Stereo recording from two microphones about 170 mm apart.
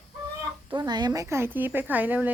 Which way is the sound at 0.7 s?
25° right (ahead or behind).